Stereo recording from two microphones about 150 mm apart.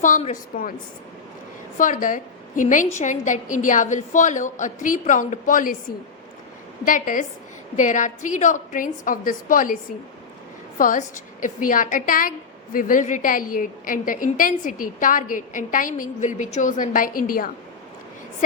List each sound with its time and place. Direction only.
0.5 s a woman's voice: 60° left (ahead or behind)
1.8 s a woman's voice: 60° left (ahead or behind)
6.8 s a woman's voice: 60° left (ahead or behind)
10.8 s a woman's voice: 60° left (ahead or behind)